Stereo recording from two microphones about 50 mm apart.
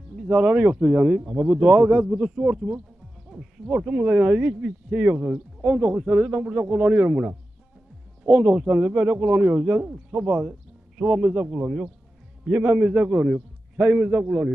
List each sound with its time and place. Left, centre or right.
0.3 s speech: right
3.3 s owl: centre
3.6 s speech: centre